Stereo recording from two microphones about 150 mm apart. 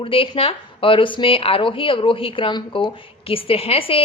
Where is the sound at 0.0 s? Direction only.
35° left (ahead or behind).